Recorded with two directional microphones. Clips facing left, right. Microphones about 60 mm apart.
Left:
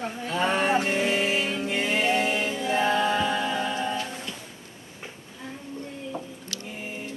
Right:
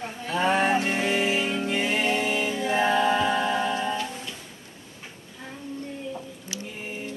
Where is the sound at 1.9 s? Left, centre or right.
Centre.